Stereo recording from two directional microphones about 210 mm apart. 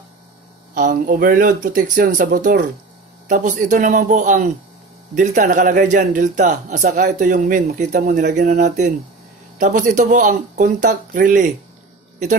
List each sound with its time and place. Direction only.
0.7 s a man's voice: 40° right (ahead or behind)